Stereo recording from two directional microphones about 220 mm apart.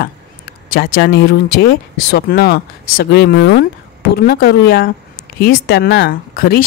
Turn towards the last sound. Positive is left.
turn(degrees=40)  # may be behind; listen again after turning